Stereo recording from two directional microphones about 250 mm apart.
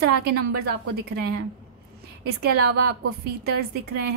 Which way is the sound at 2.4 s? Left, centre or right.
Right.